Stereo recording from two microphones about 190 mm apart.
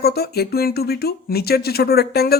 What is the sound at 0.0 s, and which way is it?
Speech, 55° left (ahead or behind).